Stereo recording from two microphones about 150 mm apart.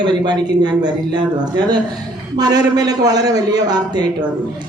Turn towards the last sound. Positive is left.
turn(degrees=-25)  # may be behind; listen again after turning